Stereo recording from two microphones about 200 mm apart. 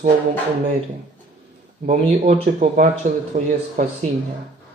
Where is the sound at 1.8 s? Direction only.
35° right (ahead or behind).